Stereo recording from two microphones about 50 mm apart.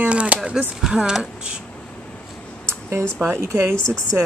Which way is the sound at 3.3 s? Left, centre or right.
Right.